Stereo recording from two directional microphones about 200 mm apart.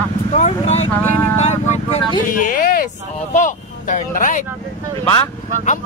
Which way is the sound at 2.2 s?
40° left (ahead or behind).